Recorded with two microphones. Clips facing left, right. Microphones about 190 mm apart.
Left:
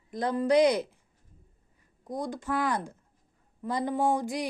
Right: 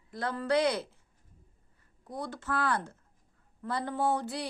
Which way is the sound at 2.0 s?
15° left (ahead or behind).